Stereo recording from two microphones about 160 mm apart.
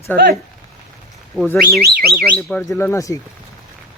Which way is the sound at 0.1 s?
10° left (ahead or behind).